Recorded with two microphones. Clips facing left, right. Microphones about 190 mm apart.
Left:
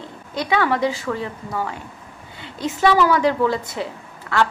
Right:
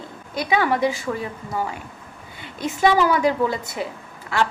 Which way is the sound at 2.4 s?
15° right (ahead or behind).